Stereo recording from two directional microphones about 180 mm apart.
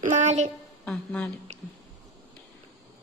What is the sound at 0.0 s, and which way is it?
Speech, 40° right (ahead or behind).